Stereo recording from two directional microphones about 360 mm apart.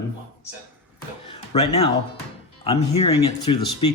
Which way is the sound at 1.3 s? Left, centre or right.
Centre.